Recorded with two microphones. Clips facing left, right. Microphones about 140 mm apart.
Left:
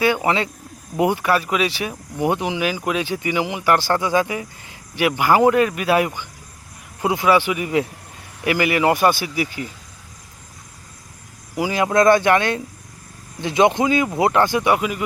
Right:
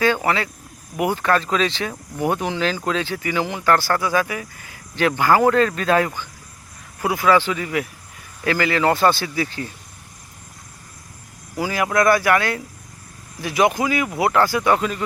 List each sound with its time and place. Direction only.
0.0 s speech: 15° left (ahead or behind)
11.5 s speech: 20° left (ahead or behind)